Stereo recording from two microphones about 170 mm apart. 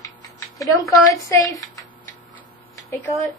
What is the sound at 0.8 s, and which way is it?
Speech, 20° left (ahead or behind).